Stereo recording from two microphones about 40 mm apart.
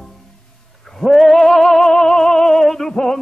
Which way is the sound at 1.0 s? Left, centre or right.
Centre.